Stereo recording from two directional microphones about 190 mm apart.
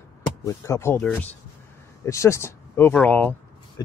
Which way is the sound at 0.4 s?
15° left (ahead or behind).